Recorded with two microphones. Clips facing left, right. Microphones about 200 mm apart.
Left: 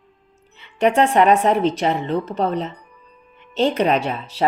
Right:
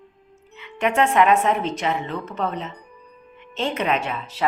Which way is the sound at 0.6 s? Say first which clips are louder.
Left 4 dB; 35° left (ahead or behind).